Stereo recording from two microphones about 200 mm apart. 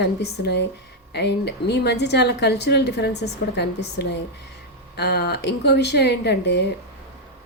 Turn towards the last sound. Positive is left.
turn(degrees=60)  # may be behind; listen again after turning